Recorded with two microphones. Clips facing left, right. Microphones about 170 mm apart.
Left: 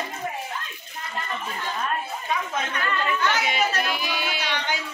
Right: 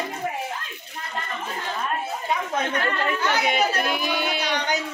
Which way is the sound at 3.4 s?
55° right (ahead or behind).